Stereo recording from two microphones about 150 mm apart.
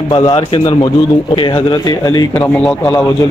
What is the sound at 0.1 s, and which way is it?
A man's voice, 30° left (ahead or behind).